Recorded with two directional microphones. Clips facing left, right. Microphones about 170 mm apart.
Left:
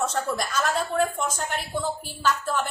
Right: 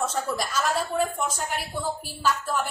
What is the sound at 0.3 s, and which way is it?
Speech, 5° right (ahead or behind).